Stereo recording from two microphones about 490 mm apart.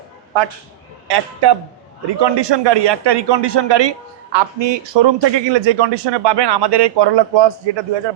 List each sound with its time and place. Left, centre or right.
1.0 s a man's voice: right